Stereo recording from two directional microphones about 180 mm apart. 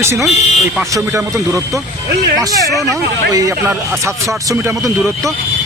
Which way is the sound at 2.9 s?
15° right (ahead or behind).